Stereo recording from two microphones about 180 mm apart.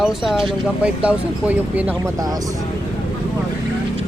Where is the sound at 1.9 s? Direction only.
20° right (ahead or behind).